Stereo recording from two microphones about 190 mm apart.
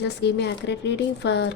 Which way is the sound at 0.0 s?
65° left (ahead or behind).